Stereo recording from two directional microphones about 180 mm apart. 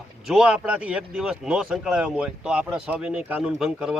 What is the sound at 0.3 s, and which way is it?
Speech, 5° right (ahead or behind).